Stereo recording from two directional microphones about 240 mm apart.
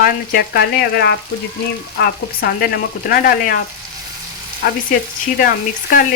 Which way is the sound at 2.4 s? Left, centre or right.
Left.